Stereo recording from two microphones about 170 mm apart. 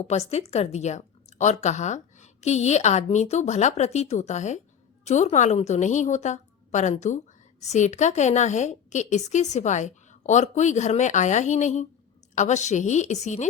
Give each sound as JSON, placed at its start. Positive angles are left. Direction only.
{"t": 0.0, "sound": "a woman's voice", "side_deg": 40}